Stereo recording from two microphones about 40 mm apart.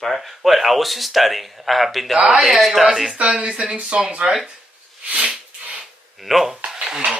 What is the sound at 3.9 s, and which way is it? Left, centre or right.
Speech, centre.